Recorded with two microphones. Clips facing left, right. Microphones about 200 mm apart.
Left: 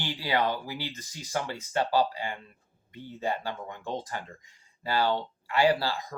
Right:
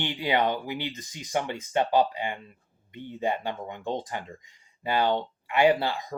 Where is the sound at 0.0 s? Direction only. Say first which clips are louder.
Right 3 dB; 20° right (ahead or behind).